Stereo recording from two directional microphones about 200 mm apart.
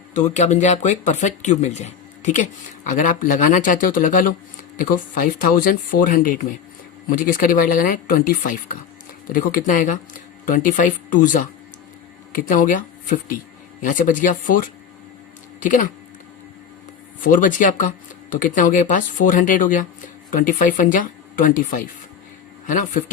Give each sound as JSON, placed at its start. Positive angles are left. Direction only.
{"t": 0.1, "sound": "speech", "side_deg": 35}
{"t": 15.6, "sound": "speech", "side_deg": 40}
{"t": 17.2, "sound": "speech", "side_deg": 40}